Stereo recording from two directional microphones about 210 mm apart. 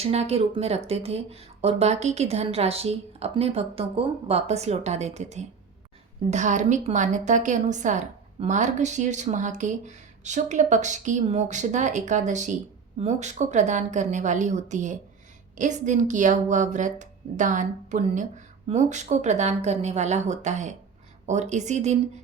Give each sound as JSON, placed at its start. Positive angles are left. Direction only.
{"t": 0.0, "sound": "a woman's voice", "side_deg": -30}